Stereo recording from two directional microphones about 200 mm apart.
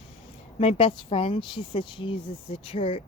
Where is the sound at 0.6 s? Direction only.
30° left (ahead or behind).